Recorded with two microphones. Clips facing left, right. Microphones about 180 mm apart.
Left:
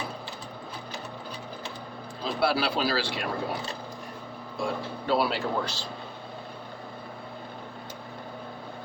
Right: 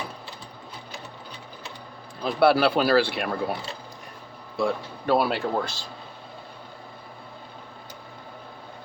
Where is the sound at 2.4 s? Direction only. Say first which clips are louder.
Right 7 dB; 55° right (ahead or behind).